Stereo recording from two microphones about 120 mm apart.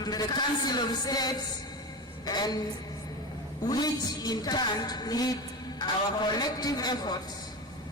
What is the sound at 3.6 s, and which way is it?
A woman's voice, 35° left (ahead or behind).